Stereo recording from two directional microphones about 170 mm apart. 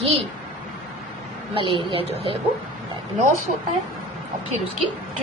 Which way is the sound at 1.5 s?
30° right (ahead or behind).